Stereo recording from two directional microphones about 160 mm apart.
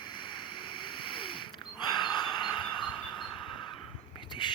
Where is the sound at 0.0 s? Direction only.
30° left (ahead or behind).